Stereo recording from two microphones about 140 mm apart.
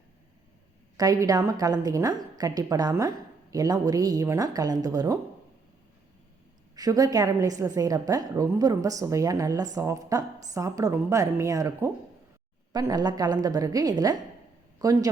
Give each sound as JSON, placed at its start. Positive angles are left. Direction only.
{"t": 0.9, "sound": "a woman's voice", "side_deg": -25}
{"t": 6.7, "sound": "a woman's voice", "side_deg": -25}